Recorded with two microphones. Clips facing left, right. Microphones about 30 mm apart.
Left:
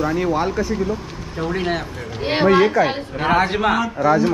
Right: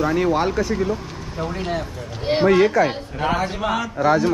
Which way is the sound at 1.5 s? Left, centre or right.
Left.